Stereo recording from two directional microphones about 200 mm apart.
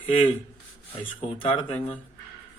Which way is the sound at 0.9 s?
30° left (ahead or behind).